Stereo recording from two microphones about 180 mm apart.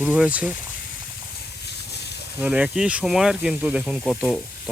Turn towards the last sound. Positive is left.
turn(degrees=5)  # may be behind; listen again after turning